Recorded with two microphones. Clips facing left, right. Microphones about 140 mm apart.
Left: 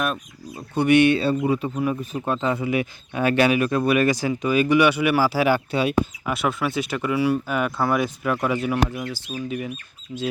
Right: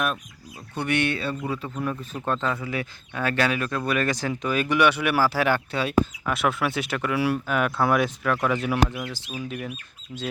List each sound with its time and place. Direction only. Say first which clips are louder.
0.8 s speech: left 9 dB; 15° left (ahead or behind)
6.3 s speech: left 1 dB; centre (ahead or behind)